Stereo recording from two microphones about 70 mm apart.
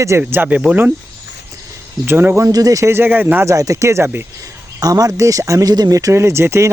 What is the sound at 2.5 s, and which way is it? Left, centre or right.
Speech, right.